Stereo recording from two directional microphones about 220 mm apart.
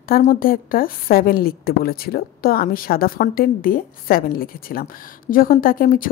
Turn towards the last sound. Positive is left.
turn(degrees=40)  # may be behind; listen again after turning